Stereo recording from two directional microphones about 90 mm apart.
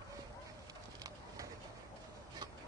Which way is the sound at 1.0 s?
40° right (ahead or behind).